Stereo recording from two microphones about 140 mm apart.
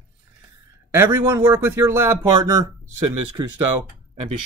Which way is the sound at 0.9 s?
15° right (ahead or behind).